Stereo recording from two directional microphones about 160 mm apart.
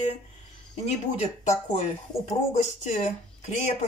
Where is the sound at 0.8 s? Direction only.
45° left (ahead or behind).